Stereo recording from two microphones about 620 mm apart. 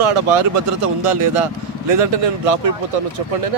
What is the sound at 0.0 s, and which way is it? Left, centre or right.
Speech, right.